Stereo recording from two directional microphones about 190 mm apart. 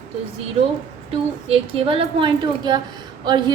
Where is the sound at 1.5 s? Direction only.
30° right (ahead or behind).